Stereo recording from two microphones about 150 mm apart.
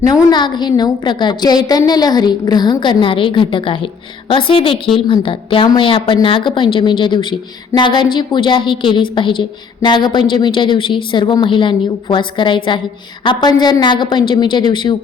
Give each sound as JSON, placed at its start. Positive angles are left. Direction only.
{"t": 0.1, "sound": "a woman's voice", "side_deg": 30}